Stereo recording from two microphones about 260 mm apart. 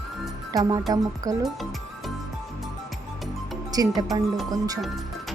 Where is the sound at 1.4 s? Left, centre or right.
Centre.